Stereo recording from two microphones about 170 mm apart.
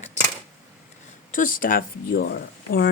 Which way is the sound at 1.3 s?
50° left (ahead or behind).